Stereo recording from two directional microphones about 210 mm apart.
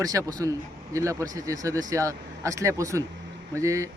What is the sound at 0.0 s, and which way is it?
A man's voice, 15° right (ahead or behind).